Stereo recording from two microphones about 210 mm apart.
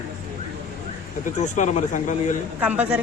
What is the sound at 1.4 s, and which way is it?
A man's voice, 35° left (ahead or behind).